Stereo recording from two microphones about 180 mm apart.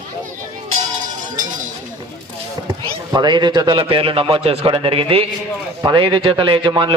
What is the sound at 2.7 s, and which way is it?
A man's voice, 25° right (ahead or behind).